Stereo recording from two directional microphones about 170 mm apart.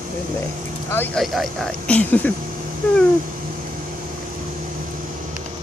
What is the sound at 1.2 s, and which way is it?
Speech, centre (ahead or behind).